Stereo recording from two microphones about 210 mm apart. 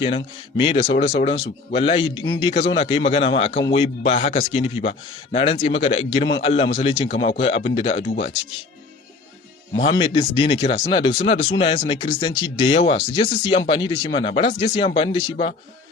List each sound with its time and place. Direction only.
0.0 s speech: 25° left (ahead or behind)
9.7 s speech: 25° left (ahead or behind)